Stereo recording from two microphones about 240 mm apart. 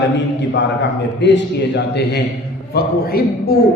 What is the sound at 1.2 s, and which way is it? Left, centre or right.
A man's voice, left.